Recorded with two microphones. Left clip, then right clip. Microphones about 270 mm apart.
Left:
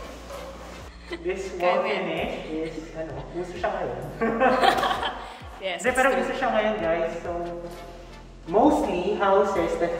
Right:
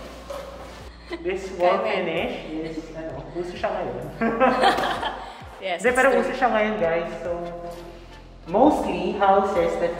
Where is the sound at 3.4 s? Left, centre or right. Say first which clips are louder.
Right 1 dB; centre.